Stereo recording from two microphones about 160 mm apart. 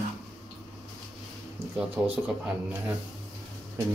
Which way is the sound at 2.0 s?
5° right (ahead or behind).